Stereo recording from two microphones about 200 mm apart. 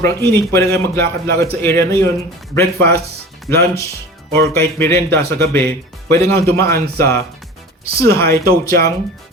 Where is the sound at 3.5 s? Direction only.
15° left (ahead or behind).